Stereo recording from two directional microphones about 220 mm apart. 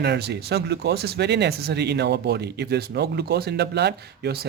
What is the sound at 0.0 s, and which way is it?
Speech, 50° right (ahead or behind).